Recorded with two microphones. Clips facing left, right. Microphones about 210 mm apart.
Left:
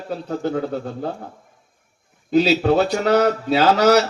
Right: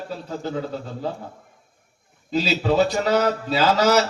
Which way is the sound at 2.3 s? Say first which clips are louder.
Left 5 dB; 55° left (ahead or behind).